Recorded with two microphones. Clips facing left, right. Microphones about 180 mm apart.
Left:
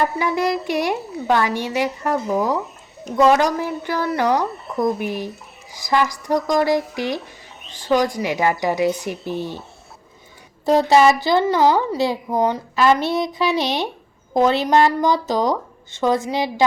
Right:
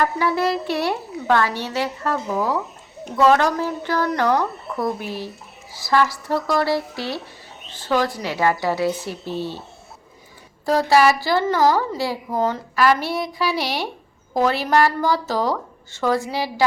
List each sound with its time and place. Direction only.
0.0 s a woman's voice: 15° left (ahead or behind)
10.7 s a woman's voice: 20° left (ahead or behind)